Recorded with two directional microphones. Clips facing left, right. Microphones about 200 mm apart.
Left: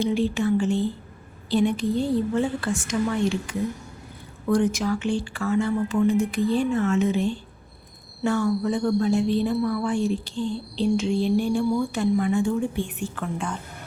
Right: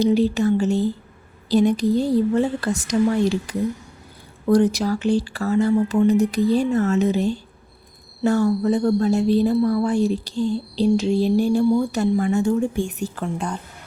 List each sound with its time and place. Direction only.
0.0 s a woman's voice: 40° right (ahead or behind)